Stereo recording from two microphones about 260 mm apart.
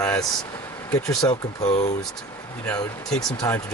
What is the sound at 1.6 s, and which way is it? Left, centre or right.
Speech, left.